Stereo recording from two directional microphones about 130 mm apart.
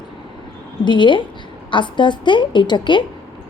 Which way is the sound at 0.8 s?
40° left (ahead or behind).